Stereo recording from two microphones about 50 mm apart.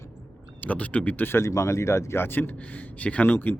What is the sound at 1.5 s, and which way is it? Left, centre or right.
Speech, left.